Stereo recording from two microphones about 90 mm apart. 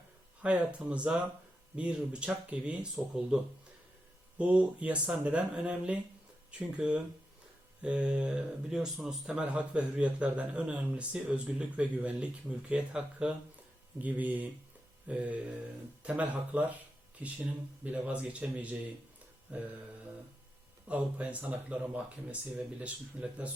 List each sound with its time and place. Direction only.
0.4 s speech: 15° right (ahead or behind)
20.8 s speech: 15° right (ahead or behind)